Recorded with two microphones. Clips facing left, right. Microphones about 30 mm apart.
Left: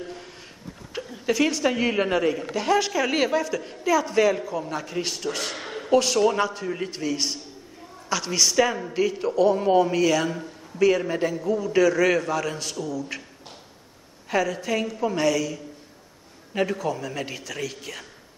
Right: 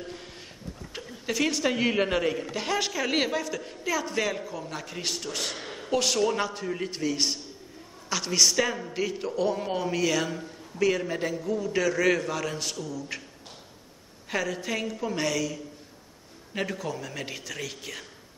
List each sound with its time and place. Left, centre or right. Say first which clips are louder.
0.9 s a woman's voice: left 6 dB; centre
5.7 s a sound: left 7 dB; centre
6.1 s a man's voice: left 5 dB; centre
11.6 s a man's voice: left 5 dB; centre
14.3 s a man's voice: left 5 dB; centre
14.9 s a man's voice: left 5 dB; centre
15.1 s a man's voice: left 5 dB; centre